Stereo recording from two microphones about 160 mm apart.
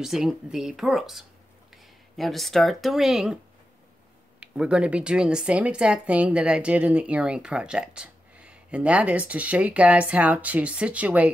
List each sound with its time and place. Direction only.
0.0 s speech: 5° right (ahead or behind)
4.4 s speech: 5° right (ahead or behind)